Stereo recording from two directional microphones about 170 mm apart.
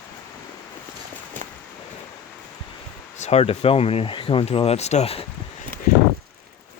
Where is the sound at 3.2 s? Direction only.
40° left (ahead or behind).